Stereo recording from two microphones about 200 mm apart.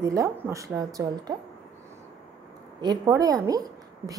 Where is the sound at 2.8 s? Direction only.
20° right (ahead or behind).